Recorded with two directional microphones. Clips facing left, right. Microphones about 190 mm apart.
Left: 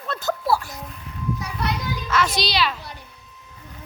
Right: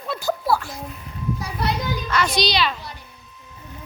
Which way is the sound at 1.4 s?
30° right (ahead or behind).